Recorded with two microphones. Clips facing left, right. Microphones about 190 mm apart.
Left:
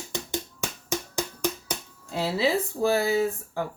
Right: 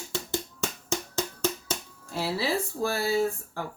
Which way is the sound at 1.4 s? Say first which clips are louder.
Even; 15° left (ahead or behind).